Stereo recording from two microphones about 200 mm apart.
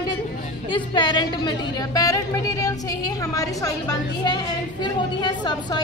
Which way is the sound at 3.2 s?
15° left (ahead or behind).